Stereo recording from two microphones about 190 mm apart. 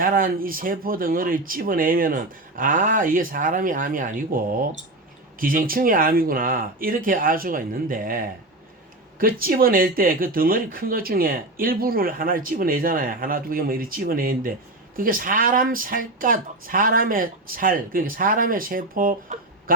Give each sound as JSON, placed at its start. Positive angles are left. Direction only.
{"t": 0.0, "sound": "speech", "side_deg": -45}